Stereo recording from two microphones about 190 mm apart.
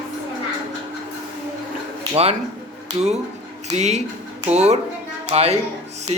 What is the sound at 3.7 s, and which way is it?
A man's voice, 35° right (ahead or behind).